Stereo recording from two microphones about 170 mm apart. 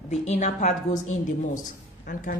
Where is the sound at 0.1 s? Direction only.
40° left (ahead or behind).